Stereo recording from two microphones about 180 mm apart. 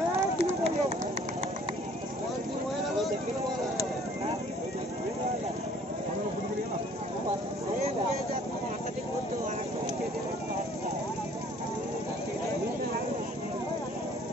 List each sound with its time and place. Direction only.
0.4 s run: 35° right (ahead or behind)